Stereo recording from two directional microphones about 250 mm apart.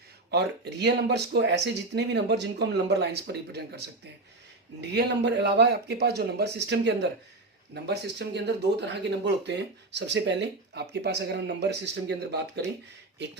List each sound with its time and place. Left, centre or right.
0.3 s speech: right
4.9 s speech: right